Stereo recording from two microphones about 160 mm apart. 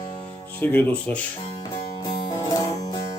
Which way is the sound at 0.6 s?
10° left (ahead or behind).